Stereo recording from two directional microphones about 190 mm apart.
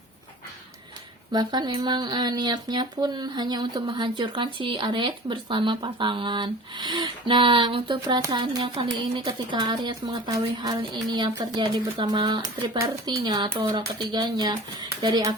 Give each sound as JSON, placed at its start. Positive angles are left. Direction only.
{"t": 1.3, "sound": "speech", "side_deg": -20}